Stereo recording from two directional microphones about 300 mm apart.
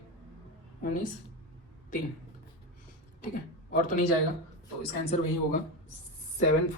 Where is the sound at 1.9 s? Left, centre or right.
Left.